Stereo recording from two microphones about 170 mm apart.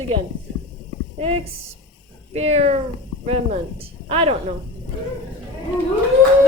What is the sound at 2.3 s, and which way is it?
A woman's voice, 40° right (ahead or behind).